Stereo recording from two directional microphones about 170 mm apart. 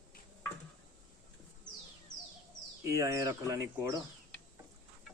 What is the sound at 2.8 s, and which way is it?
Speech, 15° right (ahead or behind).